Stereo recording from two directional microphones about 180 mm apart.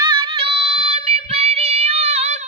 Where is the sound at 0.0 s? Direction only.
25° right (ahead or behind).